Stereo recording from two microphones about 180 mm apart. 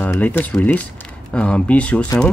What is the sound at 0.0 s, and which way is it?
Speech, 10° left (ahead or behind).